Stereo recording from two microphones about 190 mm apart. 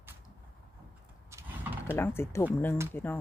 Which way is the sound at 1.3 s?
10° right (ahead or behind).